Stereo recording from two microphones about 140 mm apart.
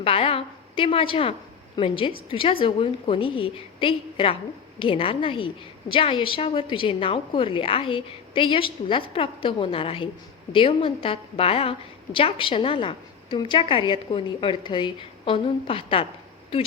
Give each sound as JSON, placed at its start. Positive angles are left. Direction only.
{"t": 0.0, "sound": "a woman's voice", "side_deg": 40}